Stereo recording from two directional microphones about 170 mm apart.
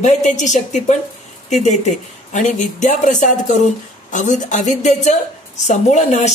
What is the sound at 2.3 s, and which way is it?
A woman's voice, 45° left (ahead or behind).